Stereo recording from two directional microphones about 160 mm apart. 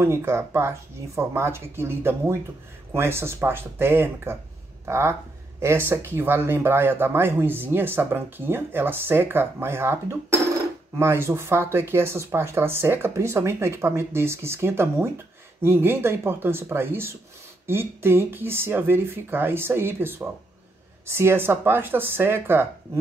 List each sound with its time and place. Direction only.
0.0 s speech: 15° right (ahead or behind)
11.0 s speech: 15° right (ahead or behind)